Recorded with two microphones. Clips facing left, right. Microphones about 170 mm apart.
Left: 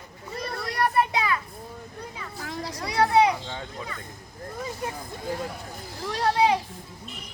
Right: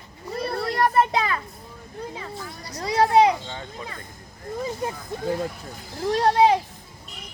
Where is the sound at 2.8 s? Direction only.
25° right (ahead or behind).